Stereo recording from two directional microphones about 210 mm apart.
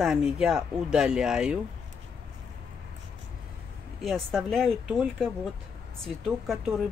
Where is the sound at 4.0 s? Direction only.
Centre (ahead or behind).